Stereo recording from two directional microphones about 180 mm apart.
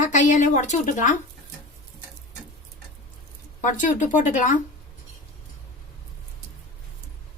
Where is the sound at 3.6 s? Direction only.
45° left (ahead or behind).